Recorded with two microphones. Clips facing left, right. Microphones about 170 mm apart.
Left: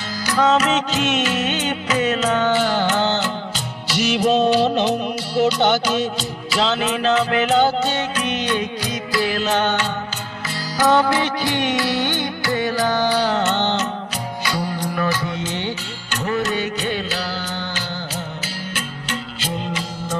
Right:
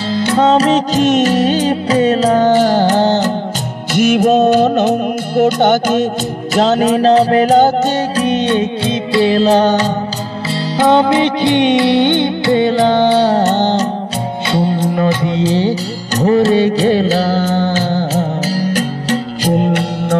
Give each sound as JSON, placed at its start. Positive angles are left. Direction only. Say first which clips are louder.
{"t": 0.1, "sound": "music", "louder": "right 6 dB", "side_deg": -25}
{"t": 3.9, "sound": "music", "louder": "right 7 dB", "side_deg": -50}
{"t": 10.8, "sound": "music", "louder": "right 6 dB", "side_deg": -25}
{"t": 14.5, "sound": "music", "louder": "right 10 dB", "side_deg": -25}
{"t": 19.5, "sound": "music", "louder": "right 12 dB", "side_deg": -60}